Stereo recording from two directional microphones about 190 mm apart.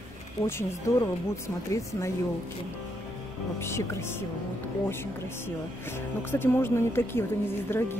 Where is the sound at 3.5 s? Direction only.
15° left (ahead or behind).